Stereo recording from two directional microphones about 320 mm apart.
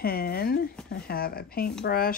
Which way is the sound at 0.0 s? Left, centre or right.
Left.